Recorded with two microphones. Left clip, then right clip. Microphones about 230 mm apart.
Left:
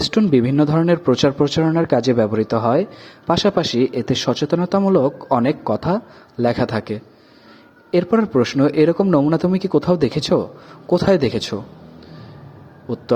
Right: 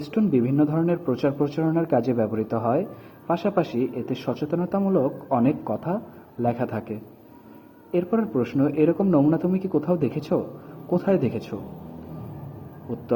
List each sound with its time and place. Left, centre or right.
0.1 s speech: left